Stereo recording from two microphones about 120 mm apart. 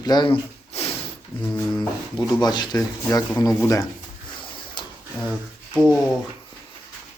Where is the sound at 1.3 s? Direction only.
45° left (ahead or behind).